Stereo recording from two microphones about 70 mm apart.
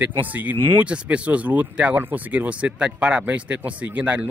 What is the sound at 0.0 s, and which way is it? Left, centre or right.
Speech, right.